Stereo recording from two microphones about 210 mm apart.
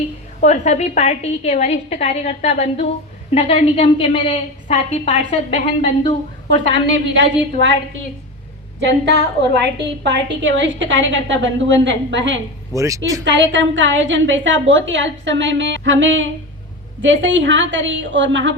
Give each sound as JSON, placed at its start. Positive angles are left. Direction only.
{"t": 0.4, "sound": "a woman's voice", "side_deg": 35}
{"t": 6.7, "sound": "a woman's voice", "side_deg": -60}
{"t": 8.8, "sound": "a woman's voice", "side_deg": -55}
{"t": 12.7, "sound": "speech", "side_deg": -15}
{"t": 13.2, "sound": "a woman's voice", "side_deg": -60}